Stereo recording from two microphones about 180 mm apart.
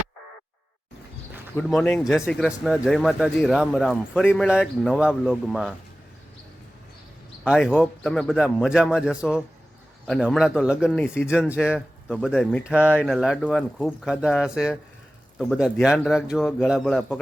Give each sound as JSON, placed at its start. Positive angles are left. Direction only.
{"t": 1.5, "sound": "speech", "side_deg": 5}
{"t": 2.2, "sound": "speech", "side_deg": 0}
{"t": 7.4, "sound": "speech", "side_deg": -5}
{"t": 12.6, "sound": "speech", "side_deg": -10}